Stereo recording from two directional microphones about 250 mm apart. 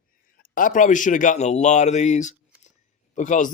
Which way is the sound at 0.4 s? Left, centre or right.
Left.